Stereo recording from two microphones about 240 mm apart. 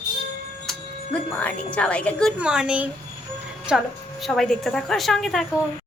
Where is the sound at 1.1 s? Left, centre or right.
Centre.